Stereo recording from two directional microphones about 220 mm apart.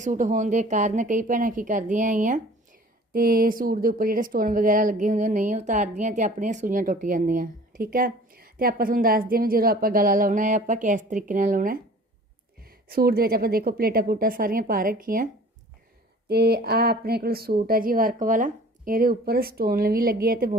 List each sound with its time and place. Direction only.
0.0 s speech: 35° right (ahead or behind)
12.9 s speech: 45° right (ahead or behind)
16.3 s speech: 45° right (ahead or behind)